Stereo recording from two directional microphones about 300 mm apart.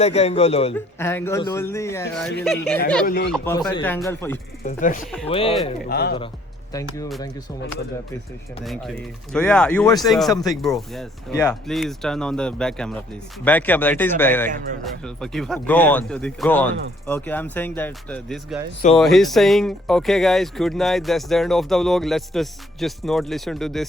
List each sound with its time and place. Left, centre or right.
0.0 s a man's voice: left
0.9 s a man's voice: centre
3.1 s speech: left
3.3 s a man's voice: centre
4.6 s a man's voice: left
5.9 s speech: left
6.7 s a man's voice: centre
8.6 s a man's voice: centre
10.5 s a man's voice: centre